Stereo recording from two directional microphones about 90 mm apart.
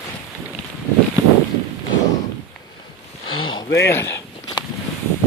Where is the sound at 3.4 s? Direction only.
65° left (ahead or behind).